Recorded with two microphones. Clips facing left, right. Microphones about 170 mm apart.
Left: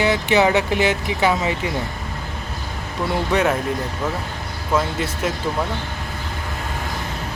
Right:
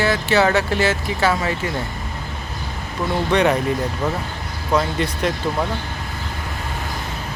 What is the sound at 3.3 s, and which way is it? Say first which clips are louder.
Speech: right 3 dB; 5° left (ahead or behind).